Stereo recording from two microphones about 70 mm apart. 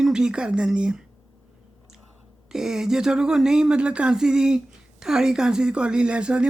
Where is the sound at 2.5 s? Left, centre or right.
Centre.